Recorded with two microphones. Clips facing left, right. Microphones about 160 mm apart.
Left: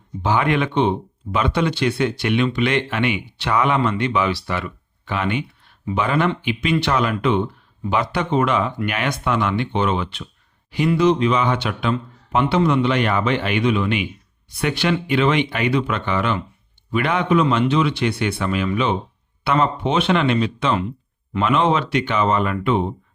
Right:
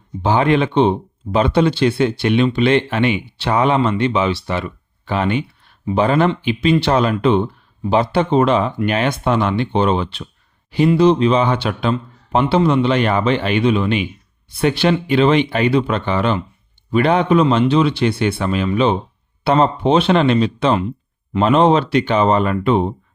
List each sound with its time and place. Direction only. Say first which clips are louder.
0.2 s speech: right 4 dB; 30° right (ahead or behind)